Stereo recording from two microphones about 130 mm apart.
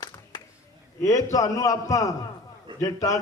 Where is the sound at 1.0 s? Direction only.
25° left (ahead or behind).